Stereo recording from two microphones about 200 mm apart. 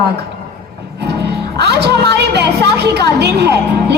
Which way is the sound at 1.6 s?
55° right (ahead or behind).